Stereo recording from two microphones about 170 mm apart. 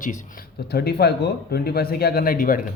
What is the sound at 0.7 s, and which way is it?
Speech, 65° left (ahead or behind).